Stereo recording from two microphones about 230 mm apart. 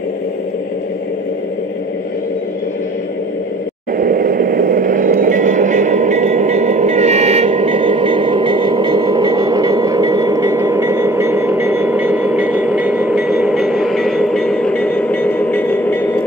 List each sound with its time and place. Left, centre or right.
4.0 s vehicle: right; by 16.3 s centre